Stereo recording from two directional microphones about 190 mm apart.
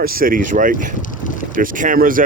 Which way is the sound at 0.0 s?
50° right (ahead or behind).